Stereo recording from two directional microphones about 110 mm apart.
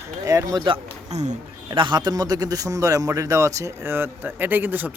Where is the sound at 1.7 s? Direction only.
45° right (ahead or behind).